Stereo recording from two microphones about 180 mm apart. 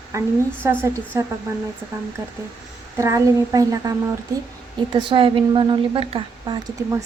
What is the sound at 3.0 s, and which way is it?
A woman's voice, 15° right (ahead or behind).